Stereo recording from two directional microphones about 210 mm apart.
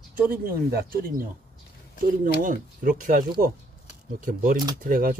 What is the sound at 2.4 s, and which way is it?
Speech, 40° right (ahead or behind).